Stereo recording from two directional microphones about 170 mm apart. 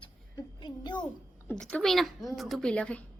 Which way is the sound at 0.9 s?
10° left (ahead or behind).